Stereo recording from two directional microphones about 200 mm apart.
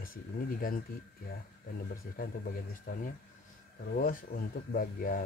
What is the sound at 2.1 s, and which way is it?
Speech, 45° left (ahead or behind).